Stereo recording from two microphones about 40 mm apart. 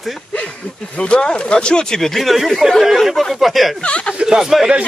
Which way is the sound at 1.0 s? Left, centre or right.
Left.